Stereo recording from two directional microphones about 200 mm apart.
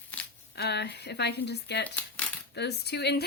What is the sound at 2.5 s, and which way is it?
Speech, 55° left (ahead or behind).